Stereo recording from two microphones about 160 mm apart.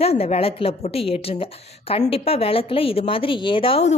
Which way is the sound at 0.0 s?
40° left (ahead or behind).